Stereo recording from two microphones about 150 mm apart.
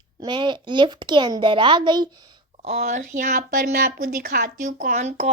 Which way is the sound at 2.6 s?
50° right (ahead or behind).